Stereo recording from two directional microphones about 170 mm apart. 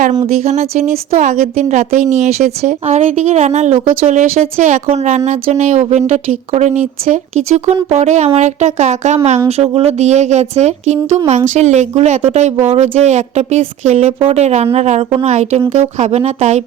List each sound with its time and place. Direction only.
0.3 s speech: 40° right (ahead or behind)